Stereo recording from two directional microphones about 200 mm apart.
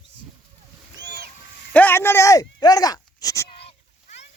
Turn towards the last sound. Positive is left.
turn(degrees=15)  # may be behind; listen again after turning